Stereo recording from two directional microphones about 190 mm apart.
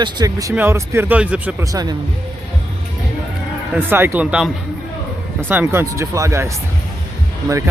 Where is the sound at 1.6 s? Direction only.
20° right (ahead or behind).